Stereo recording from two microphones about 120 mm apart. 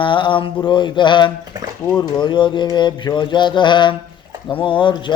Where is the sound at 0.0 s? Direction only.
45° left (ahead or behind).